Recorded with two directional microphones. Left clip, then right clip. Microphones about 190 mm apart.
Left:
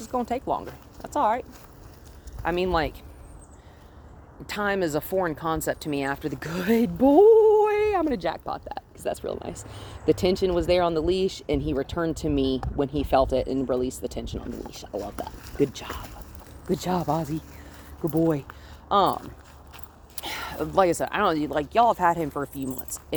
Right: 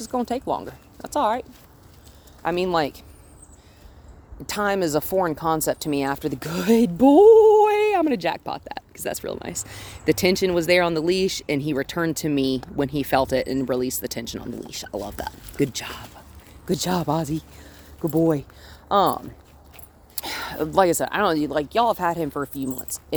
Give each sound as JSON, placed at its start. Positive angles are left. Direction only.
{"t": 0.0, "sound": "speech", "side_deg": -45}
{"t": 4.4, "sound": "speech", "side_deg": -45}
{"t": 18.0, "sound": "speech", "side_deg": -35}
{"t": 18.9, "sound": "speech", "side_deg": -50}
{"t": 20.2, "sound": "speech", "side_deg": -50}